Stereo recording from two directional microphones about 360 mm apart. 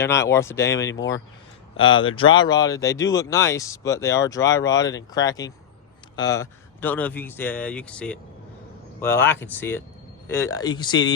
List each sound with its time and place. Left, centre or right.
0.0 s speech: centre